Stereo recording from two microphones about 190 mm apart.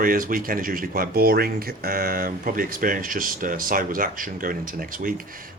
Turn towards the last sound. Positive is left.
turn(degrees=-45)  # may be behind; listen again after turning